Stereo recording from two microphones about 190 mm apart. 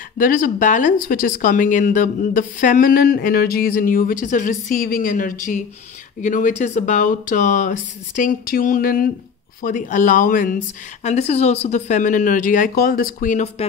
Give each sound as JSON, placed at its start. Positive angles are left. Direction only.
{"t": 0.2, "sound": "speech", "side_deg": 45}
{"t": 11.1, "sound": "a woman's voice", "side_deg": 35}